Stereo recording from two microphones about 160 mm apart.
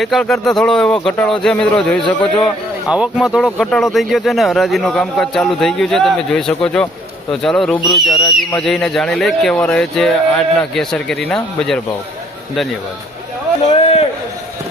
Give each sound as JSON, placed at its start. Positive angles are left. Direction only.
{"t": 0.0, "sound": "speech", "side_deg": 0}
{"t": 2.9, "sound": "speech", "side_deg": -5}
{"t": 13.7, "sound": "a man's voice", "side_deg": 40}